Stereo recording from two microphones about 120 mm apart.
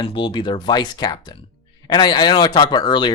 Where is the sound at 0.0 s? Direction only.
40° left (ahead or behind).